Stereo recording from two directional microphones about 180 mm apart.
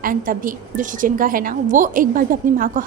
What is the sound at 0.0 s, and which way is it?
A woman's voice, 50° right (ahead or behind).